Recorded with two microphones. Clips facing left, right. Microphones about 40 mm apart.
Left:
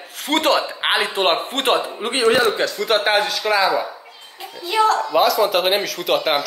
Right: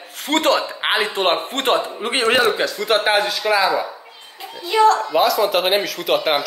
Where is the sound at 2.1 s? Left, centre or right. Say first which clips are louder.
Even; right.